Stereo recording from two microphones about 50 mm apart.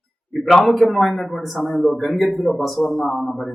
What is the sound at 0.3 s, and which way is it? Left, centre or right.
A man's voice, centre.